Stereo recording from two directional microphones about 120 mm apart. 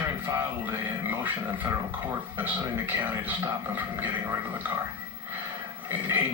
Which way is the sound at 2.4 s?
15° right (ahead or behind).